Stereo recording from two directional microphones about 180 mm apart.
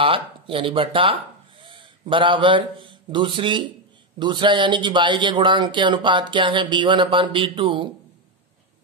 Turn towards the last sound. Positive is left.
turn(degrees=-30)  # may be behind; listen again after turning